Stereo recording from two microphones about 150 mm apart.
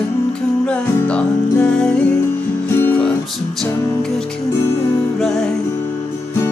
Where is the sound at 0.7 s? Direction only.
5° left (ahead or behind).